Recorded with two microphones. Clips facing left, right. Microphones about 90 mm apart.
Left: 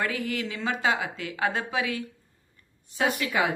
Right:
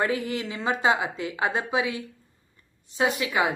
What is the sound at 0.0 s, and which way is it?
Speech, 25° right (ahead or behind).